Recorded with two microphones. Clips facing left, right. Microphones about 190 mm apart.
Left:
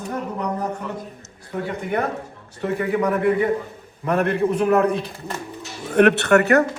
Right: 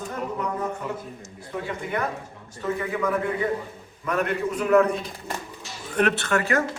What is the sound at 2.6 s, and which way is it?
Speech, 60° left (ahead or behind).